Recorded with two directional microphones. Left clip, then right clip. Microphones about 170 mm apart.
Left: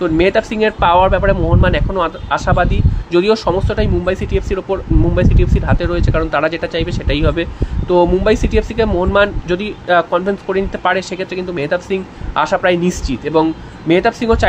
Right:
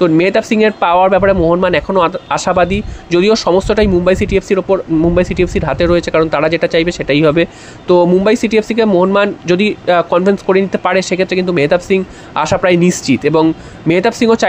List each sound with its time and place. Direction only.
0.0 s speech: 40° right (ahead or behind)